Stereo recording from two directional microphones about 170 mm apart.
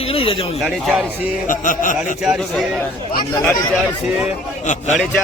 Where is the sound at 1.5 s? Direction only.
50° left (ahead or behind).